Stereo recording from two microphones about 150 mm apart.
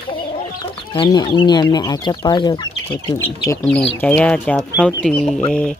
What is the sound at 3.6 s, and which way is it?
Speech, 5° left (ahead or behind).